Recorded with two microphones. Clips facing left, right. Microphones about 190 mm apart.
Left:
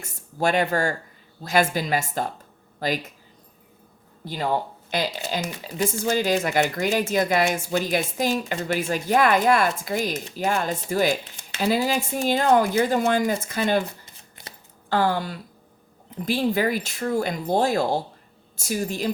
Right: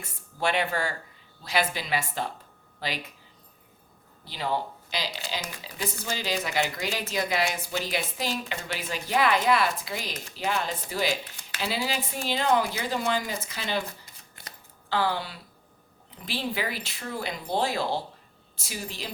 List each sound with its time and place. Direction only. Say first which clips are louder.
0.0 s speech: left 5 dB; 45° left (ahead or behind)
4.3 s speech: left 5 dB; 50° left (ahead or behind)
14.8 s speech: left 5 dB; 45° left (ahead or behind)